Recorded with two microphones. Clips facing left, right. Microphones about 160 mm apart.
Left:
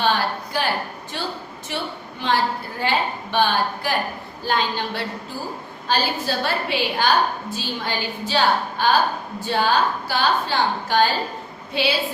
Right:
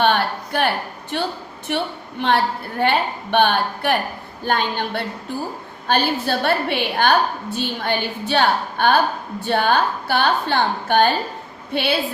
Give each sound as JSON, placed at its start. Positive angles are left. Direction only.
{"t": 0.0, "sound": "a woman's voice", "side_deg": -60}